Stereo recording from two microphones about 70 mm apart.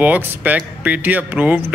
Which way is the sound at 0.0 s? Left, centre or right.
Right.